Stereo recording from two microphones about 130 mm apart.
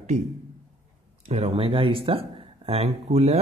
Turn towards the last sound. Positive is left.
turn(degrees=-50)  # may be behind; listen again after turning